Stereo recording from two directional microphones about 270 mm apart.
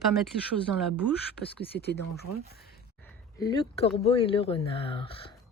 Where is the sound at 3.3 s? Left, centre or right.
Centre.